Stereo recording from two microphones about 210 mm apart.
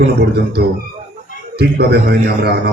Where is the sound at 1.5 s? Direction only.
50° right (ahead or behind).